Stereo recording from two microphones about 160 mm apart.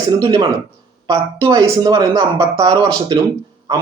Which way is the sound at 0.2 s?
20° right (ahead or behind).